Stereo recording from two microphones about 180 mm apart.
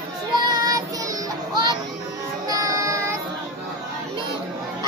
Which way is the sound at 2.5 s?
20° right (ahead or behind).